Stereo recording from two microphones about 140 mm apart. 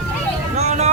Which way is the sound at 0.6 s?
50° right (ahead or behind).